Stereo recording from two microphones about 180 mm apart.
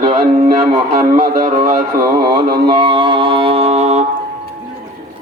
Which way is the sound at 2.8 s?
30° right (ahead or behind).